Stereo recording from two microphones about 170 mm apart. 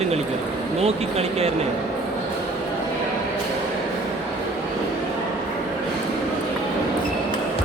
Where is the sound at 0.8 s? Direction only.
35° right (ahead or behind).